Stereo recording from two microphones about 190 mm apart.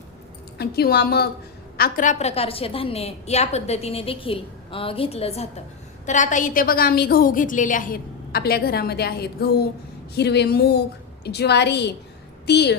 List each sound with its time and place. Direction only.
0.6 s a woman's voice: 55° left (ahead or behind)